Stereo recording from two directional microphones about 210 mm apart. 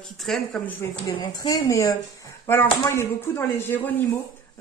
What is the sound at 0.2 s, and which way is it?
Speech, centre (ahead or behind).